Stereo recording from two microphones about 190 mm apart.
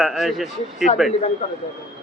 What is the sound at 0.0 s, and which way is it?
Speech, centre (ahead or behind).